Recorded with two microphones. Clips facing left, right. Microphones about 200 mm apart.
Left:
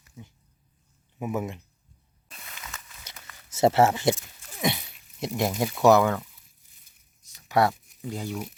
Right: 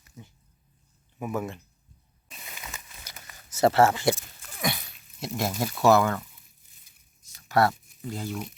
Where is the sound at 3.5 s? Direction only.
25° left (ahead or behind).